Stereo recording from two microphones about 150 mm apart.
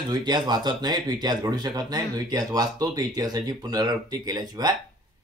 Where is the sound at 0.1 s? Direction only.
30° right (ahead or behind).